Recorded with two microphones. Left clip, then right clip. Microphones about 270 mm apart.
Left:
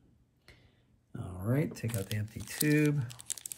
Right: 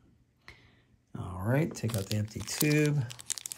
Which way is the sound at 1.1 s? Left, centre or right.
Right.